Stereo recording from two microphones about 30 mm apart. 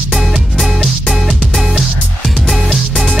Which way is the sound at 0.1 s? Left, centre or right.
Centre.